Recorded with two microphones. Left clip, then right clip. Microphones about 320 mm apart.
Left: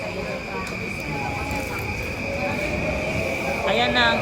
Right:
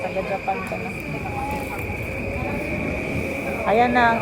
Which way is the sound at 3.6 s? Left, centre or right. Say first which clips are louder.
Right 3 dB; centre.